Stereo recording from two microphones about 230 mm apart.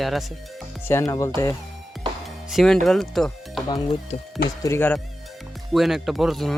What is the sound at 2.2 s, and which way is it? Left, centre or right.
Speech, centre.